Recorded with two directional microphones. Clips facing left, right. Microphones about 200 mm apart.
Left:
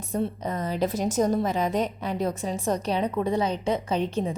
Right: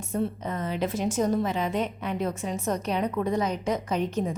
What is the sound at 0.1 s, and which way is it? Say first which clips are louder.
A woman's voice: left 1 dB; 35° left (ahead or behind).